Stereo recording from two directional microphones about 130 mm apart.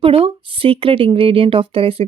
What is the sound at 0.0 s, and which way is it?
Speech, 45° right (ahead or behind).